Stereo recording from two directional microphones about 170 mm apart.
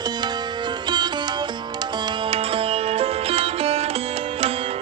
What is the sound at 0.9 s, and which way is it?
Music, 25° right (ahead or behind).